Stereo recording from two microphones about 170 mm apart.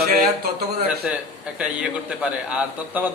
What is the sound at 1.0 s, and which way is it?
A man's voice, 5° right (ahead or behind).